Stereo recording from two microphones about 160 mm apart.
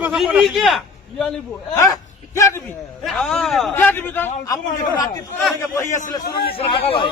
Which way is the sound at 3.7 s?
15° left (ahead or behind).